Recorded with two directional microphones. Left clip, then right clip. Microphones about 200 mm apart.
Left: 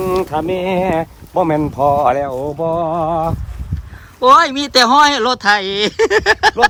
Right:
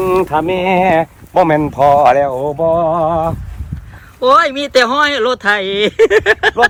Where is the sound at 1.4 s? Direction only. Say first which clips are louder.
Right 3 dB; 35° right (ahead or behind).